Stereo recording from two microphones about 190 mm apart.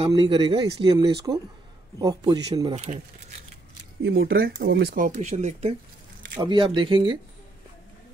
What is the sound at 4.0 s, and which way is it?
Speech, 55° right (ahead or behind).